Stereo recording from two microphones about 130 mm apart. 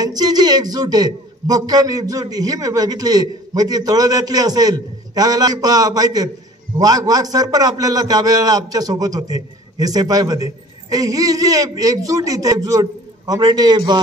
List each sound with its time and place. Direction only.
0.0 s a man's voice: 30° right (ahead or behind)